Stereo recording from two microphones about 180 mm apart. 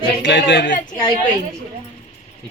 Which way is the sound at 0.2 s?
80° left.